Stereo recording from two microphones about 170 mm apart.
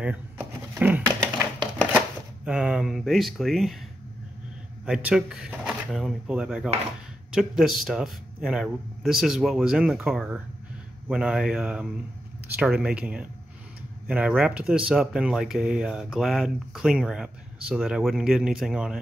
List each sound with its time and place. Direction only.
0.0 s a sound: 10° right (ahead or behind)
1.8 s chopping: 5° left (ahead or behind)
2.4 s speech: 5° right (ahead or behind)
4.8 s speech: 5° right (ahead or behind)